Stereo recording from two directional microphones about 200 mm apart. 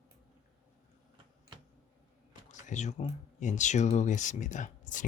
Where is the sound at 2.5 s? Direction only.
35° left (ahead or behind).